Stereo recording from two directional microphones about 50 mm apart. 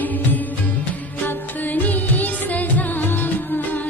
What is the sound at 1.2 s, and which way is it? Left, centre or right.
Music, left.